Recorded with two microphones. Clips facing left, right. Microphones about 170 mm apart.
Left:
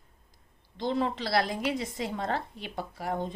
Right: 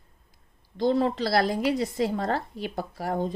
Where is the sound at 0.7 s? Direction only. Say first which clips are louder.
Right 6 dB; 40° right (ahead or behind).